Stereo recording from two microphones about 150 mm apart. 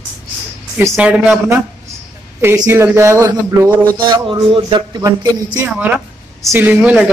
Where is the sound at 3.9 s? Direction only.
35° right (ahead or behind).